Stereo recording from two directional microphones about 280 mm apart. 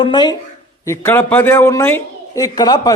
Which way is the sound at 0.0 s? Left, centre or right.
Centre.